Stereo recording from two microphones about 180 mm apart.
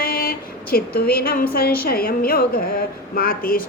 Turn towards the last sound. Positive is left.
turn(degrees=55)  # may be behind; listen again after turning